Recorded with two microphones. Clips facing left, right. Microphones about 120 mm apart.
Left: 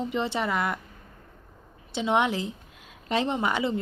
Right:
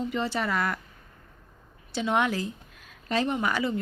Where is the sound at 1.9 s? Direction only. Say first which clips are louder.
Left 1 dB; 20° left (ahead or behind).